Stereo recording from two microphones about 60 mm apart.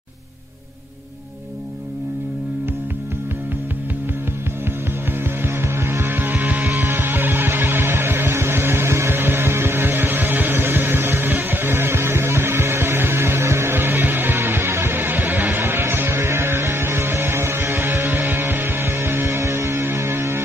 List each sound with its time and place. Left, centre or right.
5.4 s music: right